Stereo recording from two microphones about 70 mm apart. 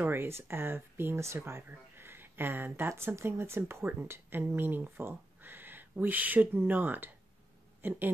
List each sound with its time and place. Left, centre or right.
0.0 s speech: right